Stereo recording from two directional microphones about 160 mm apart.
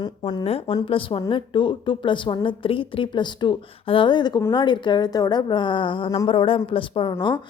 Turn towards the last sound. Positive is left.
turn(degrees=35)  # may be behind; listen again after turning